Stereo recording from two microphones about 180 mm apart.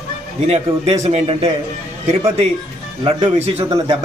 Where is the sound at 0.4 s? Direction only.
35° right (ahead or behind).